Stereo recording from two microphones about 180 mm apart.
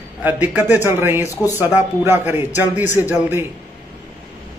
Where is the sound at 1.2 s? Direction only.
15° left (ahead or behind).